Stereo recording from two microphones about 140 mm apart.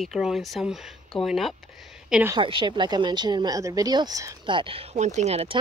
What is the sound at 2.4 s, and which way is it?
Speech, 35° right (ahead or behind).